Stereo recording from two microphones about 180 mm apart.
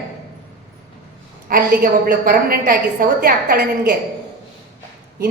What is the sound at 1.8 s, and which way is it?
A woman's voice, 55° right (ahead or behind).